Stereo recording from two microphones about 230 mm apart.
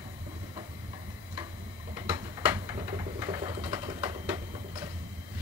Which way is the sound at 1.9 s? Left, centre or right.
Centre.